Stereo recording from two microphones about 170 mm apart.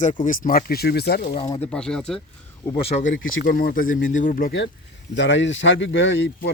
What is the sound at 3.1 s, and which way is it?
Speech, 60° left (ahead or behind).